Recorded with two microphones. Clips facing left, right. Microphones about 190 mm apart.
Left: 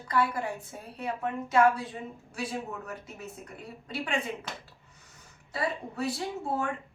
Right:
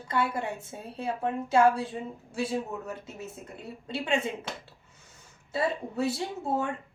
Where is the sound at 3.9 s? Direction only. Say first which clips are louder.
Right 4 dB; 25° right (ahead or behind).